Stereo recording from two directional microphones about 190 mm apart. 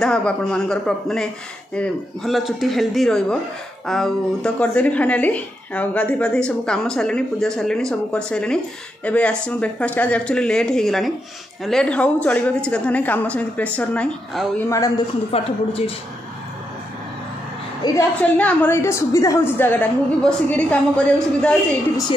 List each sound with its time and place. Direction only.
0.0 s a woman's voice: 5° left (ahead or behind)
15.3 s a woman's voice: 30° left (ahead or behind)
17.8 s a woman's voice: 20° left (ahead or behind)
18.4 s a woman's voice: 10° left (ahead or behind)